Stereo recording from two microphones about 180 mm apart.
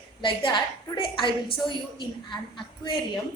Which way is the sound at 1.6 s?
25° left (ahead or behind).